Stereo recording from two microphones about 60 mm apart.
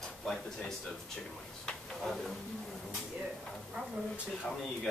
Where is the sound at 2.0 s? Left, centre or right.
Centre.